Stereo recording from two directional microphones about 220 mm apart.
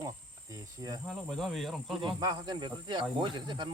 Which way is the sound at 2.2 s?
20° right (ahead or behind).